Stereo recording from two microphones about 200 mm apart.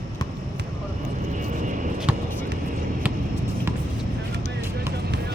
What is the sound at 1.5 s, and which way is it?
Vehicle, 40° right (ahead or behind).